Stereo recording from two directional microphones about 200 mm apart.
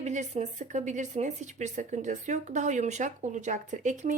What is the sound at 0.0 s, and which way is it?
A woman's voice, 35° right (ahead or behind).